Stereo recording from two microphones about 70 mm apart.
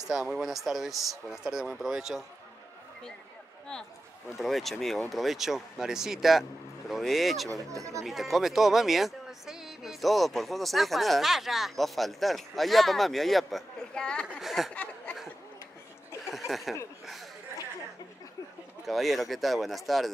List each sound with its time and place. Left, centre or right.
0.1 s speech: centre
4.3 s speech: centre
7.7 s speech: right
8.0 s speech: centre
14.7 s a sound: left
16.3 s a sound: centre
18.9 s speech: centre